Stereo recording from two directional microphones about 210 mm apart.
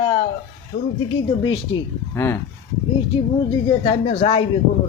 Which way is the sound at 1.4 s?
20° left (ahead or behind).